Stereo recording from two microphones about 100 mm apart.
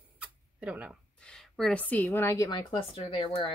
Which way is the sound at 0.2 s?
10° right (ahead or behind).